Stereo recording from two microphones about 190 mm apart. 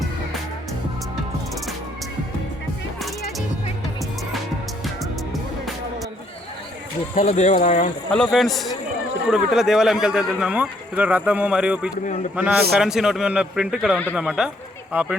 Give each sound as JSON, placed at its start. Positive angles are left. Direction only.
{"t": 7.2, "sound": "speech", "side_deg": 40}
{"t": 8.1, "sound": "speech", "side_deg": 0}